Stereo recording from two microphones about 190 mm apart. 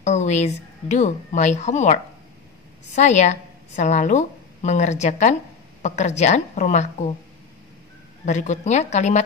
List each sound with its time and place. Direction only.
0.0 s a woman's voice: 40° left (ahead or behind)
8.3 s a woman's voice: 40° left (ahead or behind)